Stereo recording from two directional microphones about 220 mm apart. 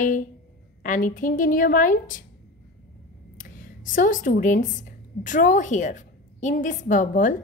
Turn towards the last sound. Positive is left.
turn(degrees=35)  # may be behind; listen again after turning